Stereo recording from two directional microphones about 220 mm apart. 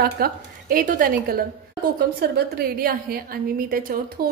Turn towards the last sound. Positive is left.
turn(degrees=-45)  # may be behind; listen again after turning